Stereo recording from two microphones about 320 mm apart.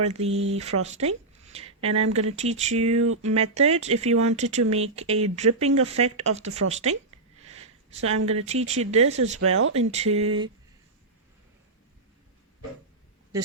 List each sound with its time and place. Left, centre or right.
0.0 s speech: centre
0.9 s a sound: centre
1.9 s speech: right
2.1 s speech: centre
7.3 s sniff: centre
8.0 s speech: right
8.3 s speech: centre
9.4 s speech: right
9.9 s speech: centre